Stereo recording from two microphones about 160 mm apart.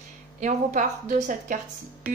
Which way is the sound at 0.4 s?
50° right (ahead or behind).